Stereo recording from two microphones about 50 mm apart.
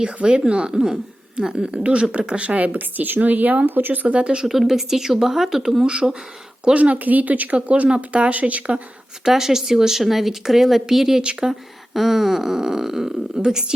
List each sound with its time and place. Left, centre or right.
0.0 s a woman's voice: right
4.4 s speech: centre
5.8 s a woman's voice: centre
9.2 s speech: centre
11.9 s speech: centre